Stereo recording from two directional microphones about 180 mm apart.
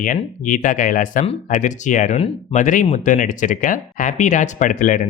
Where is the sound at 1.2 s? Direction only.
40° left (ahead or behind).